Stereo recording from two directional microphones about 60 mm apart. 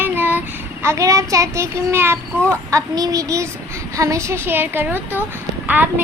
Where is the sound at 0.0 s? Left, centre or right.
Right.